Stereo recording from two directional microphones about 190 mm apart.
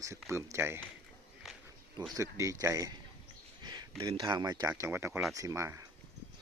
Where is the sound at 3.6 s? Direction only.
20° right (ahead or behind).